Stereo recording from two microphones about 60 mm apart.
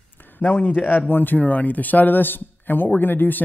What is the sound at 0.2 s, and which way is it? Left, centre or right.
Speech, left.